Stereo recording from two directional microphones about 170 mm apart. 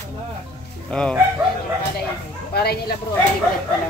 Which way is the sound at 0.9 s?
5° left (ahead or behind).